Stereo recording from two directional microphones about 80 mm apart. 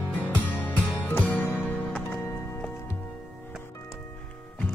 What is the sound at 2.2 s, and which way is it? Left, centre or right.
Music, left.